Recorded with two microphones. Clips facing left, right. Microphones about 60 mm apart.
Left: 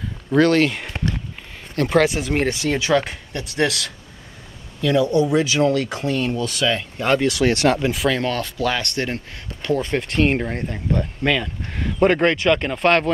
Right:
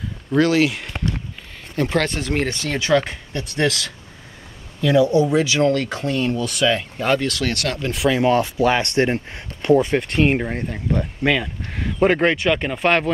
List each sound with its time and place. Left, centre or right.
0.3 s speech: centre
4.8 s speech: centre
5.6 s speech: centre
6.0 s speech: centre
7.2 s speech: centre
7.9 s speech: centre
8.3 s speech: centre
9.9 s speech: centre